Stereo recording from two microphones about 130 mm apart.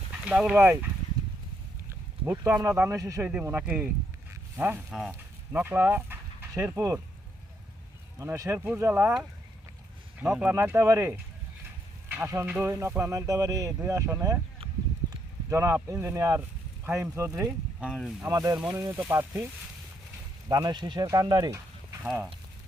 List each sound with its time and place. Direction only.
0.1 s speech: 5° right (ahead or behind)
1.9 s speech: 20° right (ahead or behind)
3.6 s speech: 10° right (ahead or behind)
4.9 s speech: centre (ahead or behind)
5.5 s speech: 15° right (ahead or behind)
8.2 s speech: 20° right (ahead or behind)
10.2 s speech: 5° right (ahead or behind)
10.5 s speech: 20° right (ahead or behind)
15.4 s speech: 20° right (ahead or behind)
17.7 s speech: 5° right (ahead or behind)
18.2 s speech: 25° right (ahead or behind)
20.5 s speech: 30° right (ahead or behind)